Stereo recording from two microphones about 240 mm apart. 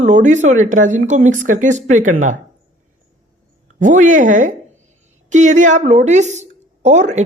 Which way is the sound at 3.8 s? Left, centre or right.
Right.